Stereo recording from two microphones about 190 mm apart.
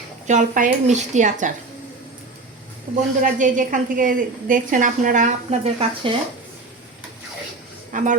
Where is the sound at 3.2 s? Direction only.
40° right (ahead or behind).